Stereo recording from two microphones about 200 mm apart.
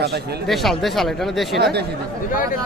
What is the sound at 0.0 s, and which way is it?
Speech, 55° right (ahead or behind).